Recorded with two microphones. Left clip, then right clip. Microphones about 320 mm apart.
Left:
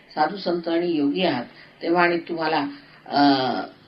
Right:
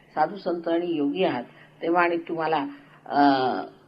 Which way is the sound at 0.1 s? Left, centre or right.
Right.